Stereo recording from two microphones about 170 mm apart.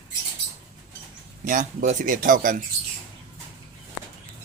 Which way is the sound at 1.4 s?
50° right (ahead or behind).